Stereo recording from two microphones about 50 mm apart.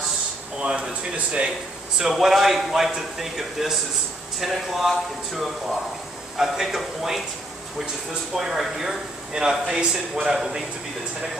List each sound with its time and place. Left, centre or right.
0.6 s speech: right
2.1 s a man's voice: centre
8.4 s speech: centre